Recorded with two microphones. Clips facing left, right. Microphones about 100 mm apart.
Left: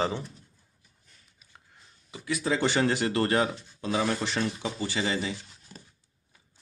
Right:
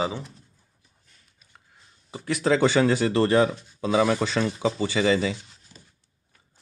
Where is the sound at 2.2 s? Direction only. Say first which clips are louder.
Right 6 dB; 75° right (ahead or behind).